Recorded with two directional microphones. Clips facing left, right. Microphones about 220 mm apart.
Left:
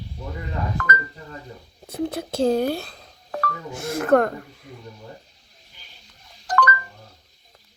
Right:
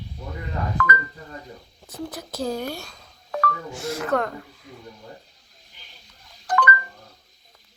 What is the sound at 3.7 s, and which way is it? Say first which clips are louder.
Speech: left 8 dB; 50° left (ahead or behind).